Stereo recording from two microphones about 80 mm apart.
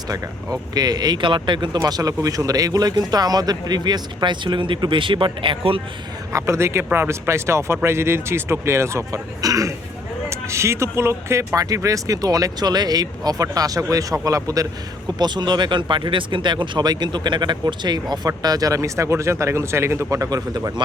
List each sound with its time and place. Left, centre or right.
0.1 s speech: right
1.8 s speech: right
6.3 s speech: right
15.2 s speech: right
18.3 s speech: right
20.5 s speech: right